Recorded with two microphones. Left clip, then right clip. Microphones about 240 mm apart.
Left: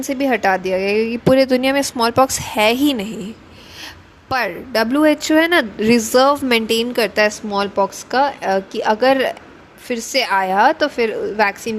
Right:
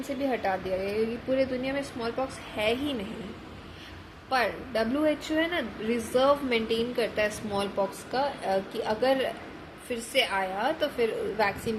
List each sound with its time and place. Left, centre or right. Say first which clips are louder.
0.2 s speech: left 13 dB; left
4.3 s speech: left 8 dB; left